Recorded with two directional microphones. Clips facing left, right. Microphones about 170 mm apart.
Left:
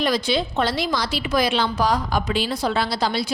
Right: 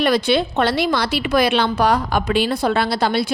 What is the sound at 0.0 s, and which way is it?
A woman's voice, 65° right (ahead or behind).